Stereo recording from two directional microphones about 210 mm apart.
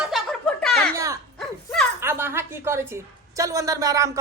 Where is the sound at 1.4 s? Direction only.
5° left (ahead or behind).